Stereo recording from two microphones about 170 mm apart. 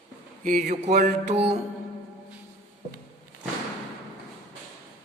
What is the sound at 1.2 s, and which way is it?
Music, 80° right.